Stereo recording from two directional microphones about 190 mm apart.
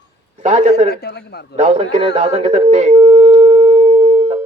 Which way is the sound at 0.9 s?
55° left (ahead or behind).